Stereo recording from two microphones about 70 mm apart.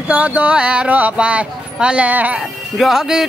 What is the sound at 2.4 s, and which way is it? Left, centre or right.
Speech, centre.